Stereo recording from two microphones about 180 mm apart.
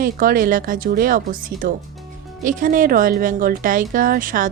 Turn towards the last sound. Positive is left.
turn(degrees=-50)  # may be behind; listen again after turning